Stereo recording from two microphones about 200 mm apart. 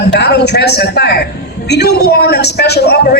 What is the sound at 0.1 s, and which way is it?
A man's voice, 55° left (ahead or behind).